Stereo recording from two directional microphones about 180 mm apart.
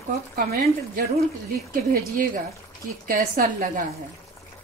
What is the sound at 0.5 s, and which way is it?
Speech, 60° right (ahead or behind).